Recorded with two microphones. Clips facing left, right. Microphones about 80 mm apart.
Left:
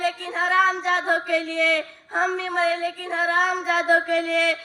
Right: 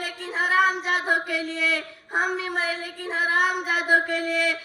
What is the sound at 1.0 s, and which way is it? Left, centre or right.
A woman's voice, centre.